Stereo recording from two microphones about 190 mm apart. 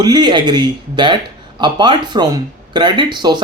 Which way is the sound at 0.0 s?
25° right (ahead or behind).